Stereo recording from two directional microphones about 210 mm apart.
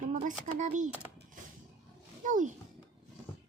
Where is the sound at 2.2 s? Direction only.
40° right (ahead or behind).